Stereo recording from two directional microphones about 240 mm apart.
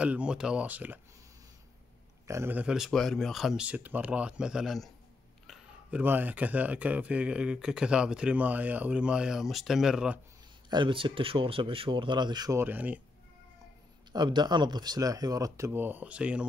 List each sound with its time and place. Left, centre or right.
0.0 s speech: centre
2.2 s speech: centre
10.7 s speech: centre
14.1 s speech: centre